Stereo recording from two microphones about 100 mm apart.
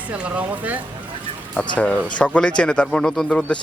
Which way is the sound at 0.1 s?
15° right (ahead or behind).